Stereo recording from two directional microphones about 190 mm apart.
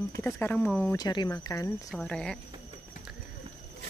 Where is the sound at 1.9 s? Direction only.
5° left (ahead or behind).